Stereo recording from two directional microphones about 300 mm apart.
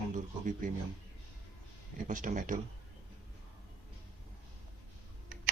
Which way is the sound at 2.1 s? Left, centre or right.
Right.